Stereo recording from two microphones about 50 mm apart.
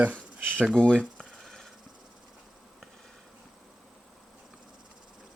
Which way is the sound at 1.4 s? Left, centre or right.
Centre.